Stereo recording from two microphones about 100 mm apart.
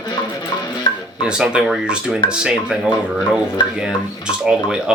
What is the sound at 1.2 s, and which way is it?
Speech, 10° right (ahead or behind).